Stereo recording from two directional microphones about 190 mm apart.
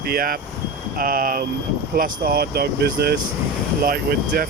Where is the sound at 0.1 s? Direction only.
50° right (ahead or behind).